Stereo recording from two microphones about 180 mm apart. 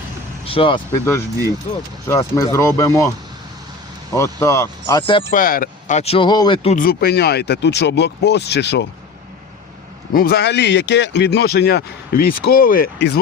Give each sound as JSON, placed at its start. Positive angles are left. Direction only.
{"t": 0.4, "sound": "speech", "side_deg": 30}
{"t": 2.0, "sound": "speech", "side_deg": 15}
{"t": 4.1, "sound": "speech", "side_deg": 15}
{"t": 5.3, "sound": "speech", "side_deg": 50}
{"t": 6.0, "sound": "speech", "side_deg": 30}
{"t": 6.7, "sound": "speech", "side_deg": 55}
{"t": 10.2, "sound": "speech", "side_deg": 60}